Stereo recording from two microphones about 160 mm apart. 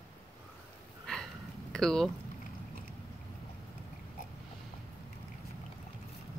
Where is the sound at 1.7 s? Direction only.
5° left (ahead or behind).